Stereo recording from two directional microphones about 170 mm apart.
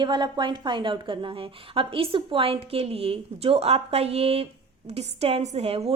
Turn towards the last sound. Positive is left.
turn(degrees=-35)  # may be behind; listen again after turning